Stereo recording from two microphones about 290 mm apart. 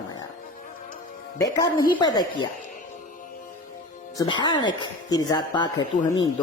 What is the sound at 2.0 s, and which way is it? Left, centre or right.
Speech, centre.